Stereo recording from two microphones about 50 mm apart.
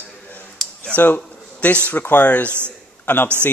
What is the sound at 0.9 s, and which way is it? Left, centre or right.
Speech, left.